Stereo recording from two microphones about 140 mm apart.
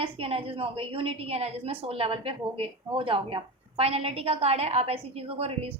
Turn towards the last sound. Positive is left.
turn(degrees=-45)  # may be behind; listen again after turning